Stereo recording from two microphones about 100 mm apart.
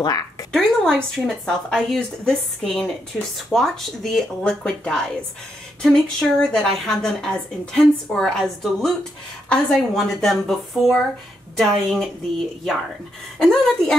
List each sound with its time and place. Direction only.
0.0 s speech: 40° left (ahead or behind)
0.5 s a woman's voice: 5° left (ahead or behind)
3.1 s speech: 10° right (ahead or behind)
3.5 s a woman's voice: 5° left (ahead or behind)
13.4 s a woman's voice: 5° left (ahead or behind)